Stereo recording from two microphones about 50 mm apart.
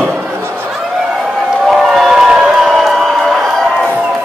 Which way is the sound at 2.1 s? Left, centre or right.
Centre.